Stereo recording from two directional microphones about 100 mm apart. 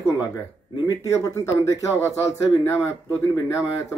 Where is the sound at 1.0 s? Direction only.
30° left (ahead or behind).